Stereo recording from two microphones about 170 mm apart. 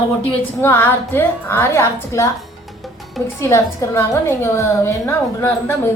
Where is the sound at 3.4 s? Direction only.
15° left (ahead or behind).